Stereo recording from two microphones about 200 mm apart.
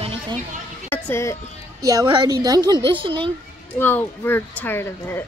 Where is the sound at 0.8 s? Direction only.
10° left (ahead or behind).